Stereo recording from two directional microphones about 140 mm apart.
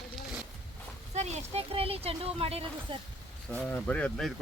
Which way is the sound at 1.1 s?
50° right (ahead or behind).